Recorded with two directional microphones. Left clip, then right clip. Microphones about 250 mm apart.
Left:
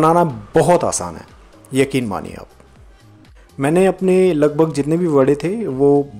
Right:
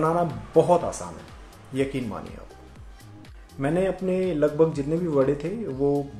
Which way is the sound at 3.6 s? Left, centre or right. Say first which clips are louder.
Left 10 dB; left.